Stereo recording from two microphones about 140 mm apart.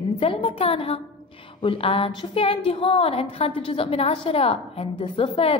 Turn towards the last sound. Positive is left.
turn(degrees=40)  # may be behind; listen again after turning